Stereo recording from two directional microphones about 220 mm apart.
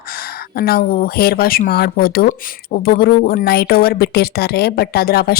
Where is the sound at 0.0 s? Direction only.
45° left (ahead or behind).